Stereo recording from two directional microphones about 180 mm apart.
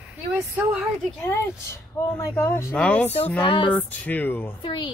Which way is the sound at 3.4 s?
25° left (ahead or behind).